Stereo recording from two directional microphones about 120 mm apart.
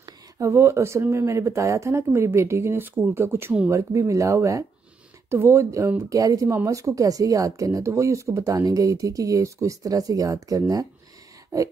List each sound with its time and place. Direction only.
0.0 s speech: 25° right (ahead or behind)